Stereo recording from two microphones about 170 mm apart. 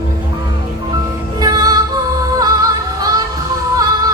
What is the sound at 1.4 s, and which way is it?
Music, 20° right (ahead or behind).